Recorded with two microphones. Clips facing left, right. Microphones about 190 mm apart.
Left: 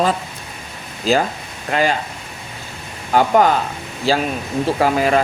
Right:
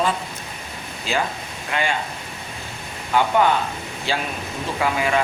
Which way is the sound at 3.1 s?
40° left (ahead or behind).